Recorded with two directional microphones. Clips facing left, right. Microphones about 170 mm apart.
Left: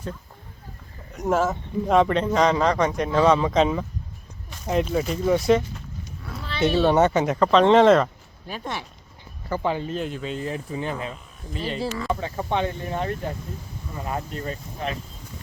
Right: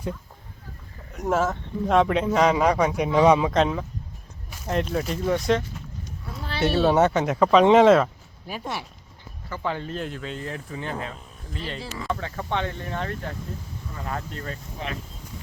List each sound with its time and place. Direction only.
1.1 s speech: centre (ahead or behind)
3.5 s speech: centre (ahead or behind)
9.6 s speech: 5° left (ahead or behind)
14.8 s speech: 45° left (ahead or behind)